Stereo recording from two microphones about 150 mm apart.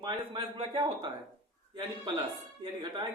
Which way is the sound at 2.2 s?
30° right (ahead or behind).